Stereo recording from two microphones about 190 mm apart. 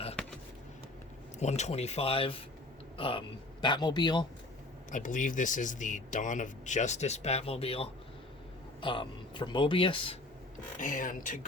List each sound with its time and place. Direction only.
1.4 s speech: 35° left (ahead or behind)
4.9 s speech: 40° left (ahead or behind); by 10.2 s 25° left (ahead or behind)
10.8 s a man's voice: 40° left (ahead or behind)